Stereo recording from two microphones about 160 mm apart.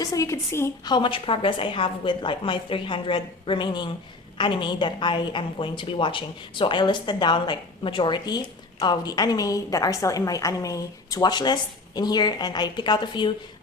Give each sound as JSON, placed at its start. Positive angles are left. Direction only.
{"t": 0.0, "sound": "a woman's voice", "side_deg": 20}
{"t": 0.9, "sound": "a woman's voice", "side_deg": 30}